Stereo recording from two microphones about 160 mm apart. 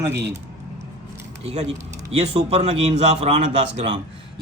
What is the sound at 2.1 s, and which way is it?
Speech, 40° right (ahead or behind).